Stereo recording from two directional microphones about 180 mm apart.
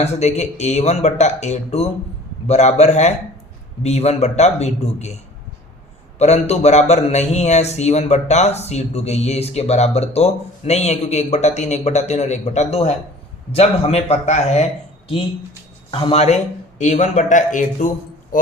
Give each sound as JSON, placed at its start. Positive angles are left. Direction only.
{"t": 0.0, "sound": "a man's voice", "side_deg": 40}
{"t": 6.1, "sound": "a man's voice", "side_deg": 35}
{"t": 15.9, "sound": "speech", "side_deg": 30}